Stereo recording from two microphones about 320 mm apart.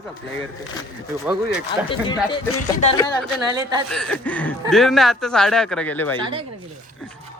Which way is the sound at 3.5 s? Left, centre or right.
Centre.